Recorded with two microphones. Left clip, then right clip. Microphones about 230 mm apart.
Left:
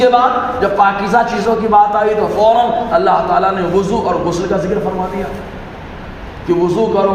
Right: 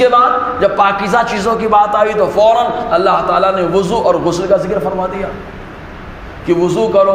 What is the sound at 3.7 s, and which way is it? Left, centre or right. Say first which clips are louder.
Speech: right 2 dB; right.